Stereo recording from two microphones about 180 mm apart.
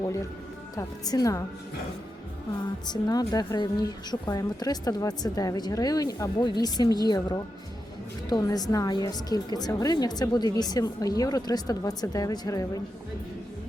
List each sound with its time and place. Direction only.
0.8 s a woman's voice: 20° left (ahead or behind)
2.8 s a woman's voice: 20° left (ahead or behind)